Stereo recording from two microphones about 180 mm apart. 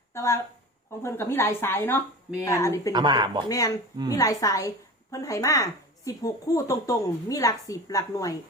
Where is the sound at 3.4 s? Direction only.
20° left (ahead or behind).